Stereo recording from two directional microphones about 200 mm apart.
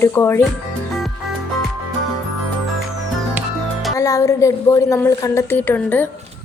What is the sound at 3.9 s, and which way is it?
Speech, 15° left (ahead or behind).